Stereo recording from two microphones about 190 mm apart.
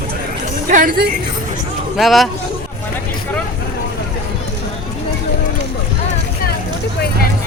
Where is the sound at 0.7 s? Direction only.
45° right (ahead or behind).